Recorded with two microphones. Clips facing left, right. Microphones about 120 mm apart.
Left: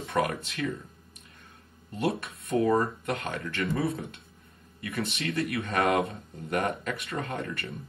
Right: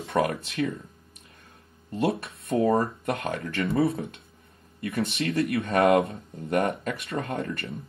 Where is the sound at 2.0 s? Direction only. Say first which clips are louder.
Right 3 dB; 30° right (ahead or behind).